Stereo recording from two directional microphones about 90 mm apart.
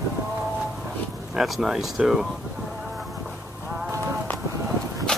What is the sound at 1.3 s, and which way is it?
Speech, 5° right (ahead or behind).